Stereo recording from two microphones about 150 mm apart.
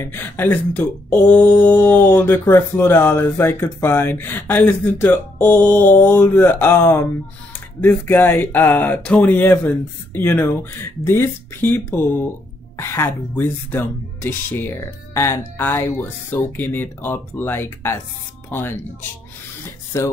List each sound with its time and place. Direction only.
0.0 s speech: 15° left (ahead or behind)
19.9 s speech: 20° left (ahead or behind)